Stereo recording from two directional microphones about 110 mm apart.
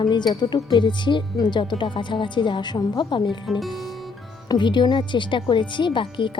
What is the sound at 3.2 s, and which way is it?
Speech, centre (ahead or behind).